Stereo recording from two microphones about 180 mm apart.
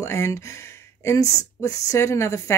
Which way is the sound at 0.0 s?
15° left (ahead or behind).